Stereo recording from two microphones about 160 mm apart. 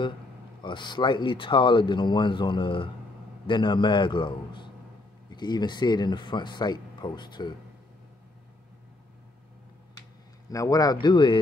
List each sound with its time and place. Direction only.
0.6 s speech: 30° left (ahead or behind)
10.5 s speech: 20° left (ahead or behind)